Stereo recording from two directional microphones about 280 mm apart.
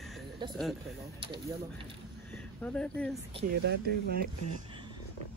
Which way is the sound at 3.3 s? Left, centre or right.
Centre.